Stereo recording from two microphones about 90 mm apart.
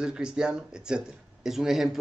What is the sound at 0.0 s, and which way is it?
Speech, 10° right (ahead or behind).